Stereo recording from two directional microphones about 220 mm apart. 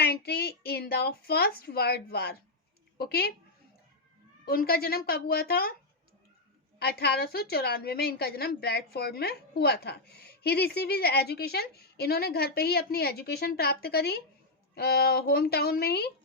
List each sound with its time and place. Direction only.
0.0 s a woman's voice: 45° left (ahead or behind)
4.4 s a woman's voice: 45° left (ahead or behind)
6.7 s a woman's voice: 45° left (ahead or behind)